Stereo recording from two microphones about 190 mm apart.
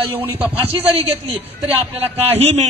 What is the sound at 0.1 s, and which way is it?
Speech, 10° right (ahead or behind).